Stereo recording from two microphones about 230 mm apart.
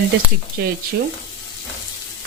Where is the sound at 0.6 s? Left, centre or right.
Right.